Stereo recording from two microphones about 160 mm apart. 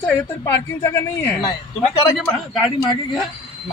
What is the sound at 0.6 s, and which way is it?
Speech, 15° left (ahead or behind).